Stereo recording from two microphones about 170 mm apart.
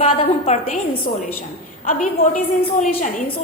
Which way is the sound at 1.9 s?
50° left (ahead or behind).